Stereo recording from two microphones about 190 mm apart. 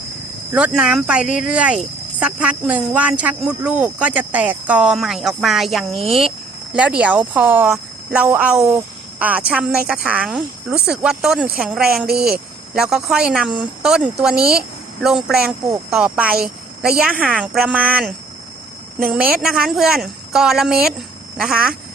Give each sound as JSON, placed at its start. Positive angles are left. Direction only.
{"t": 0.5, "sound": "speech", "side_deg": -5}
{"t": 12.0, "sound": "speech", "side_deg": -55}
{"t": 12.7, "sound": "speech", "side_deg": -5}
{"t": 16.4, "sound": "a sound", "side_deg": -55}
{"t": 17.0, "sound": "speech", "side_deg": -5}